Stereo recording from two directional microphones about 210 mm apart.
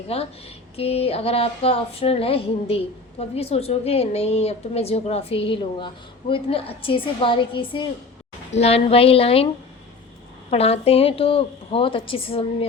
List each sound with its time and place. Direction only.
0.1 s speech: 30° left (ahead or behind)
10.5 s speech: 30° left (ahead or behind)